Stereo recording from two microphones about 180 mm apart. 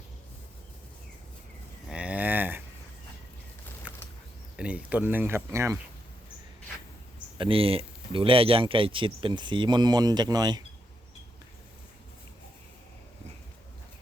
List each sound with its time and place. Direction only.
1.9 s cattle: 5° right (ahead or behind)
3.9 s a sound: 10° right (ahead or behind)
4.5 s speech: 5° right (ahead or behind)
7.3 s speech: 30° right (ahead or behind)